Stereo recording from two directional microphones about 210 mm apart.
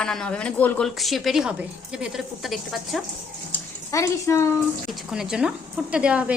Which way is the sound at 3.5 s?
15° left (ahead or behind).